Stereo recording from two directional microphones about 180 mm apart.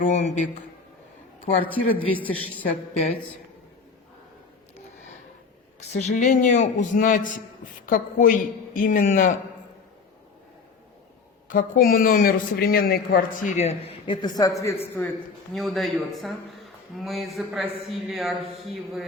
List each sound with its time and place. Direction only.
0.0 s a man's voice: 40° left (ahead or behind)
1.6 s a man's voice: 10° left (ahead or behind)
5.9 s speech: 40° left (ahead or behind)
11.4 s speech: 50° left (ahead or behind); by 15.1 s 10° left (ahead or behind)
15.5 s speech: centre (ahead or behind)